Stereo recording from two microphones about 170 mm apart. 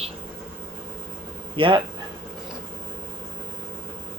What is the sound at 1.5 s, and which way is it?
Speech, 30° right (ahead or behind).